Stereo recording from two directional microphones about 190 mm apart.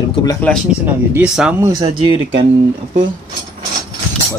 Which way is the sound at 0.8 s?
5° right (ahead or behind).